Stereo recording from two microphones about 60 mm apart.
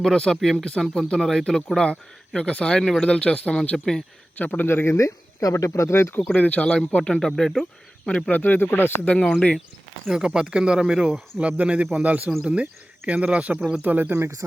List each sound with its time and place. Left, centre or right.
0.0 s speech: centre
4.4 s speech: left
4.6 s speech: left
4.9 s speech: left
6.3 s speech: left; by 7.7 s centre
8.0 s speech: left
9.0 s speech: centre
10.2 s speech: centre
11.3 s speech: right